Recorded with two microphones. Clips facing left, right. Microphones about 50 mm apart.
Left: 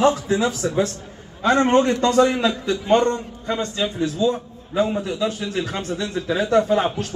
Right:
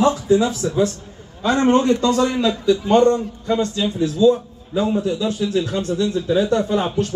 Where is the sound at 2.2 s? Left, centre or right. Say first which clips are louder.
Left 1 dB; centre.